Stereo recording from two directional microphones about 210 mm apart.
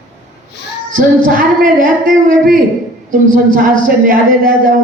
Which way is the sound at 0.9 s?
40° right (ahead or behind).